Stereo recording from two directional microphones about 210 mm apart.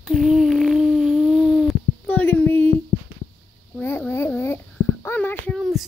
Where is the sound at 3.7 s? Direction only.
10° left (ahead or behind).